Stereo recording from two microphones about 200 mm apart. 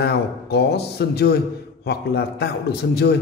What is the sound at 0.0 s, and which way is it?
A man's voice, 55° left (ahead or behind).